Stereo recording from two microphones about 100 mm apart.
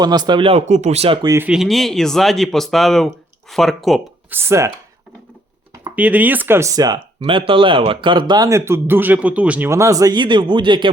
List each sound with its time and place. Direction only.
0.0 s speech: 45° right (ahead or behind); by 1.2 s 80° right
1.5 s speech: centre (ahead or behind)
4.3 s speech: 25° right (ahead or behind)
6.0 s speech: 15° right (ahead or behind); by 7.0 s 40° right (ahead or behind)
7.2 s speech: 60° right (ahead or behind)
8.4 s speech: 30° right (ahead or behind); by 9.6 s 15° right (ahead or behind)
9.6 s speech: 30° right (ahead or behind)
10.2 s speech: 50° right (ahead or behind)